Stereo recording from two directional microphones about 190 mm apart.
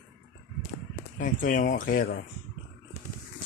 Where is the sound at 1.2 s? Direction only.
45° left (ahead or behind).